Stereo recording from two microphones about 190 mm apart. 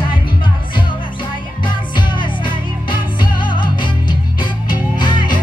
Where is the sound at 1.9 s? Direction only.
25° left (ahead or behind).